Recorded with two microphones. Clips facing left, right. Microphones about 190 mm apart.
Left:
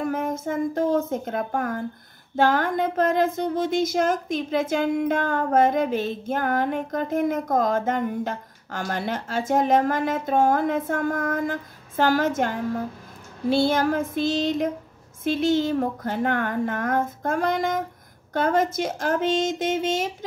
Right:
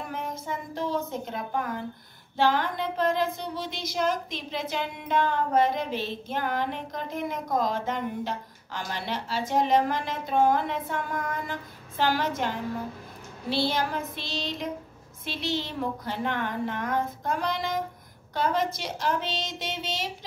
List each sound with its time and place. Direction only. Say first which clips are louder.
0.0 s a woman's voice: left 9 dB; 50° left (ahead or behind)